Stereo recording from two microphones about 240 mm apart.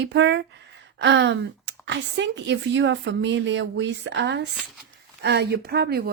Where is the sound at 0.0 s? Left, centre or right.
Right.